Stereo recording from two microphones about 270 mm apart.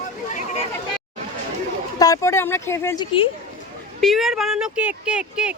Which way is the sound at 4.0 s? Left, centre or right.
Centre.